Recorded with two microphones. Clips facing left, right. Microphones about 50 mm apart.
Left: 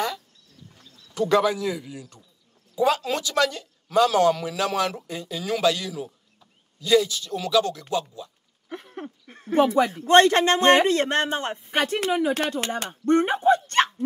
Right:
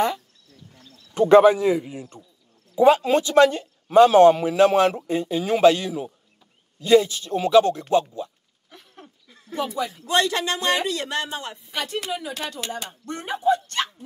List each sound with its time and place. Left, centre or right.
1.1 s speech: right
8.6 s a sound: left
9.7 s speech: left